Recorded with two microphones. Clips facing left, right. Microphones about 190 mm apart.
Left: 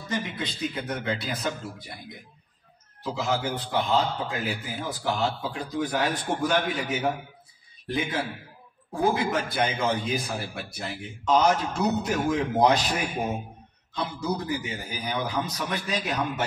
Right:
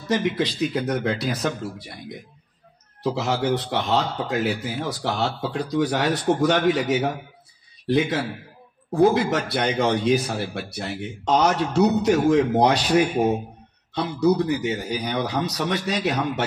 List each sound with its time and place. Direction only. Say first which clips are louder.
0.1 s speech: right 9 dB; 85° right
3.2 s a man's voice: right 4 dB; 75° right (ahead or behind)